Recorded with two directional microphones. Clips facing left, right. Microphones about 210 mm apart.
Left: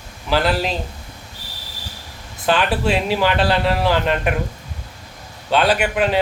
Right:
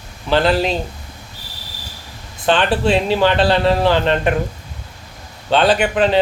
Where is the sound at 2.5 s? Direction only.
30° right (ahead or behind).